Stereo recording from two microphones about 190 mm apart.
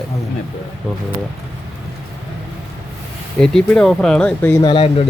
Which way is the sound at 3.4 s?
5° left (ahead or behind).